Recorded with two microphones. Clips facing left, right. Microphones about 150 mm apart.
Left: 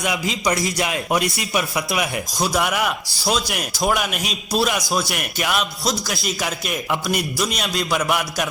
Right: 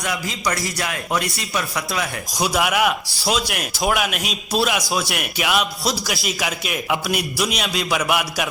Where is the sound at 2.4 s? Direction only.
5° right (ahead or behind).